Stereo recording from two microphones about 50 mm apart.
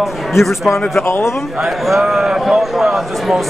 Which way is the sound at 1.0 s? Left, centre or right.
Left.